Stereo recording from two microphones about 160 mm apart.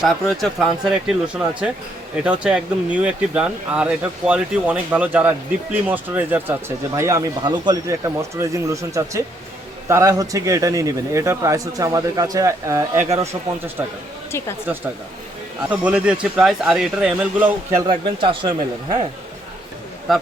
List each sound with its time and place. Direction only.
0.0 s speech: centre (ahead or behind); by 13.2 s 20° right (ahead or behind)
15.7 s speech: 10° right (ahead or behind)
17.8 s speech: 30° right (ahead or behind)